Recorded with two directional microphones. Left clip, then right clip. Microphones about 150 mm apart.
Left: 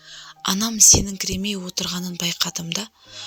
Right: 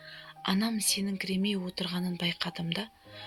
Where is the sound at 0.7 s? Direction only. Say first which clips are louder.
Left 16 dB; 45° left (ahead or behind).